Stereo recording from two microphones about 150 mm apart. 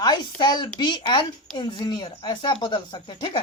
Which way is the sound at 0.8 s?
30° left (ahead or behind).